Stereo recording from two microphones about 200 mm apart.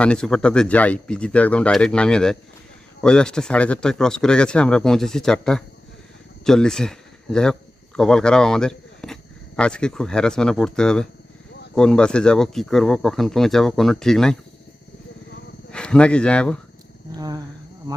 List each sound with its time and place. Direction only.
0.0 s speech: 5° left (ahead or behind)
15.7 s speech: 5° left (ahead or behind)
17.2 s a sound: 20° right (ahead or behind)